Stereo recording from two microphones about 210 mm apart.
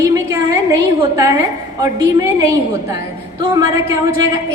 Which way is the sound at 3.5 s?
15° right (ahead or behind).